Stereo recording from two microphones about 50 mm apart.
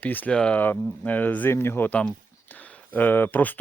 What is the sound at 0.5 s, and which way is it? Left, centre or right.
Speech, left.